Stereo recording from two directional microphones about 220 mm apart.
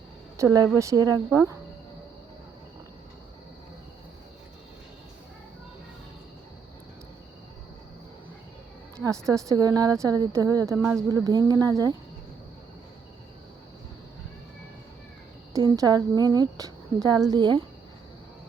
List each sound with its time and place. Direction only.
0.3 s a woman's voice: 15° right (ahead or behind)
9.3 s a woman's voice: 15° right (ahead or behind)
15.5 s a woman's voice: 15° right (ahead or behind)